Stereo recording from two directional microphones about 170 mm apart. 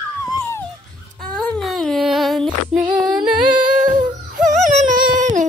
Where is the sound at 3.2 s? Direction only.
30° right (ahead or behind).